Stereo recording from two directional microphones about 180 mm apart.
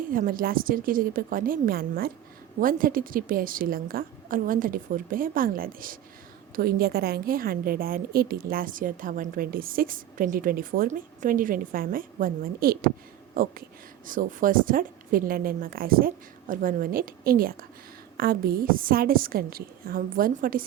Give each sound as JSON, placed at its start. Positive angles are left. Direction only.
{"t": 0.1, "sound": "a woman's voice", "side_deg": -50}